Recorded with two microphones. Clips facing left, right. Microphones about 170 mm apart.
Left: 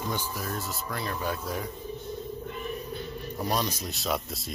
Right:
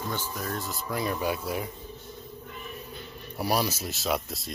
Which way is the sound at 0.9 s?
10° right (ahead or behind).